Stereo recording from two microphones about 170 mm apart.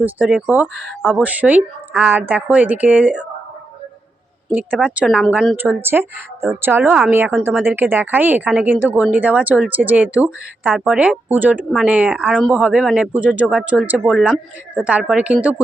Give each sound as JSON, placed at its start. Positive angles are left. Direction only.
{"t": 0.0, "sound": "speech", "side_deg": -10}
{"t": 4.5, "sound": "a woman's voice", "side_deg": -10}
{"t": 5.5, "sound": "speech", "side_deg": -10}